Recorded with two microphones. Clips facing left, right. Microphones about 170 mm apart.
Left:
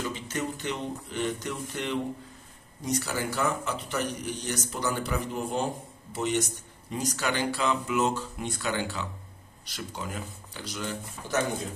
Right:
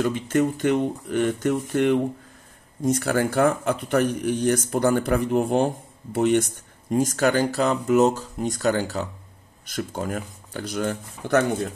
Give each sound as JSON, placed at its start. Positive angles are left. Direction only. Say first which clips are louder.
{"t": 0.0, "sound": "speech", "louder": "right 11 dB", "side_deg": -55}